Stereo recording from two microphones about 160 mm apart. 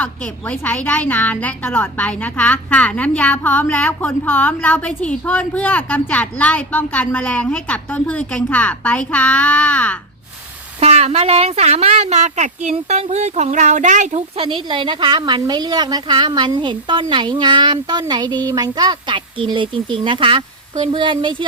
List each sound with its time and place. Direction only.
0.0 s speech: 5° left (ahead or behind)
10.8 s a woman's voice: 40° right (ahead or behind)